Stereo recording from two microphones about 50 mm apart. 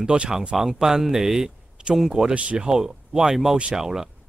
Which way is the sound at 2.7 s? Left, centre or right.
Centre.